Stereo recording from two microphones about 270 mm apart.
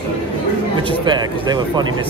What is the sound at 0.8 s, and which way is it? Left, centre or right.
Speech, centre.